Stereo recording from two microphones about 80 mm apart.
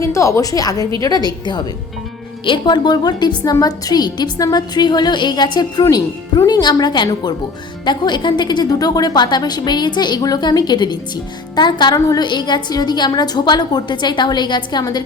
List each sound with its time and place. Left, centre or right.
0.0 s a woman's voice: left
2.4 s a woman's voice: left
11.9 s a woman's voice: left
12.2 s a woman's voice: left